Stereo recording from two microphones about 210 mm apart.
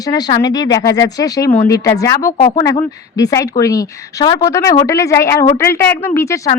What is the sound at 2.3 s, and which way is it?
A woman's voice, 25° left (ahead or behind).